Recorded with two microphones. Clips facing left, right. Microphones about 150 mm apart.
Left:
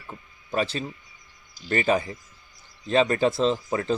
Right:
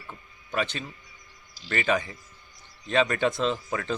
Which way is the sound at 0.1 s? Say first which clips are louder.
Left 4 dB; 35° left (ahead or behind).